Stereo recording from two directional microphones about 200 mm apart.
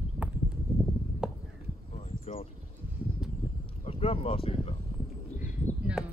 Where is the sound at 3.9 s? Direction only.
30° left (ahead or behind).